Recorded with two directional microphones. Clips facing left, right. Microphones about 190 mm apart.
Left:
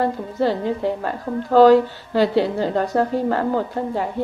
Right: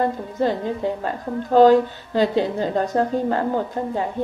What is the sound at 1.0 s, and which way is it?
A woman's voice, 20° right (ahead or behind).